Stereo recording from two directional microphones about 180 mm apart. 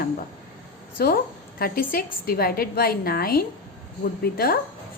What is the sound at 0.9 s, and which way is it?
A woman's voice, 55° left (ahead or behind).